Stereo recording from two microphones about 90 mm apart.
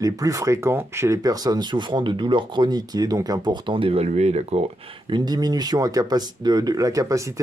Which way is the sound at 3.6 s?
75° right (ahead or behind).